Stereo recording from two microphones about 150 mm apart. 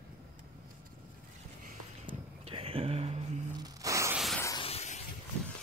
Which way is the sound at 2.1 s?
40° right (ahead or behind).